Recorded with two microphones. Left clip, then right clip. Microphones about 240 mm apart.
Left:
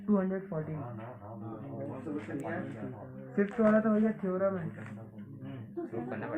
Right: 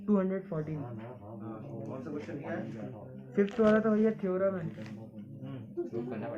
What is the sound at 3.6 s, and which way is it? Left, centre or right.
Speech, right.